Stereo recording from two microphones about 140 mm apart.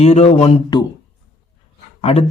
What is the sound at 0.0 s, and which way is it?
Speech, 50° left (ahead or behind).